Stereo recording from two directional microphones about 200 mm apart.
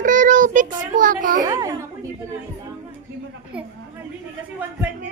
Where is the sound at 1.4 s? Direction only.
15° right (ahead or behind).